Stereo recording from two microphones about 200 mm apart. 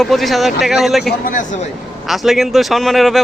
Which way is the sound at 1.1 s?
40° left (ahead or behind).